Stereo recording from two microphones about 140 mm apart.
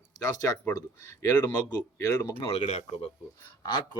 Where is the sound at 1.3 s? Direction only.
30° left (ahead or behind).